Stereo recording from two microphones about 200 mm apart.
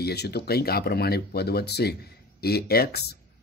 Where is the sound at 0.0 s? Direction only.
55° left (ahead or behind).